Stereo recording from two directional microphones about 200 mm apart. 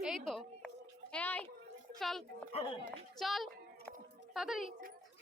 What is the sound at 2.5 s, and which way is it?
Speech, 25° left (ahead or behind).